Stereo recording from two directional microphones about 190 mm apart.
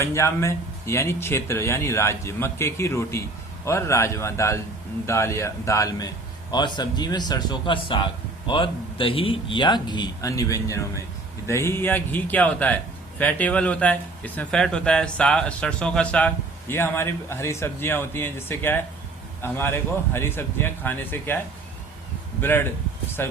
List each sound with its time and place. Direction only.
0.0 s a man's voice: 15° left (ahead or behind)
22.4 s a man's voice: 10° left (ahead or behind)